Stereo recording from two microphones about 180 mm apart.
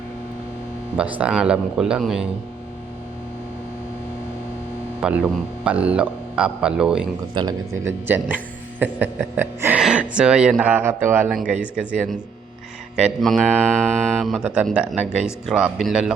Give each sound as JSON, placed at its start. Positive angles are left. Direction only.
{"t": 1.2, "sound": "speech", "side_deg": -5}
{"t": 5.0, "sound": "speech", "side_deg": -5}
{"t": 7.3, "sound": "speech", "side_deg": -25}
{"t": 8.0, "sound": "speech", "side_deg": -10}